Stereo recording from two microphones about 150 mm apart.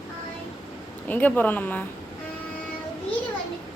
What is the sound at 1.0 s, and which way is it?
Speech, 10° left (ahead or behind).